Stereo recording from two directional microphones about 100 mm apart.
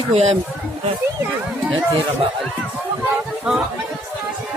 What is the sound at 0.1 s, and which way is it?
Speech, 90° right.